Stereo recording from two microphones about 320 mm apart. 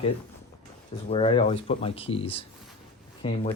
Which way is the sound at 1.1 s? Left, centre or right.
Centre.